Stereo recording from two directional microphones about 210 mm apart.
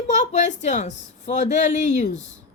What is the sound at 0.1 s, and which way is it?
Speech, 35° left (ahead or behind).